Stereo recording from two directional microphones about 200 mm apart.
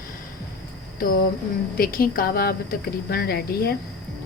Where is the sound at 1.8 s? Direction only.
45° left (ahead or behind).